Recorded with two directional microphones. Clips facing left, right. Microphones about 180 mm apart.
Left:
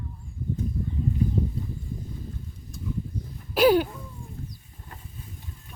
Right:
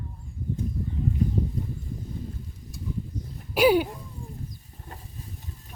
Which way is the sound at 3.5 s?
10° right (ahead or behind).